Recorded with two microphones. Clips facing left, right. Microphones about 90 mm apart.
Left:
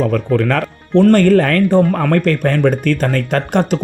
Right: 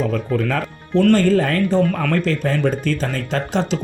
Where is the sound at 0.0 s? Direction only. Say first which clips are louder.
Left 5 dB; 60° left (ahead or behind).